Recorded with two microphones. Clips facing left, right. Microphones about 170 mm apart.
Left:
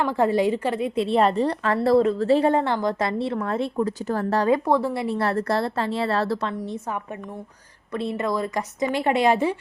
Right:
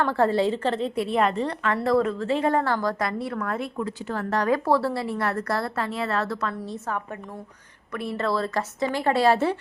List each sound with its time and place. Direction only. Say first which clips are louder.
0.0 s a woman's voice: left 1 dB; 15° left (ahead or behind)
0.9 s a woman's voice: left 7 dB; 30° left (ahead or behind)
2.5 s a woman's voice: left 2 dB; 20° left (ahead or behind)
6.5 s a woman's voice: left 2 dB; 20° left (ahead or behind)